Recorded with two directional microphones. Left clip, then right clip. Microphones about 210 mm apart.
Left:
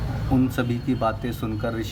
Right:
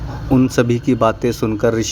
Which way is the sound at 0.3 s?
40° right (ahead or behind).